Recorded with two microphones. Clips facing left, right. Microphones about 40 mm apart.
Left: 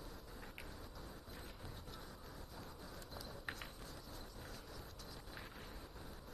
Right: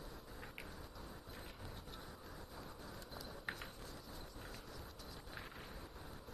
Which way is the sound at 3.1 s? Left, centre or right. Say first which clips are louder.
Right 1 dB; centre.